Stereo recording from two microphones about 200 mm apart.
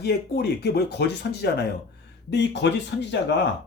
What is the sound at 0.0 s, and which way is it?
Speech, 55° left (ahead or behind).